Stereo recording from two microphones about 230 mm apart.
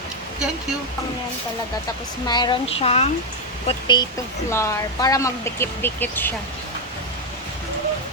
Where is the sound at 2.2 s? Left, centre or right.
Centre.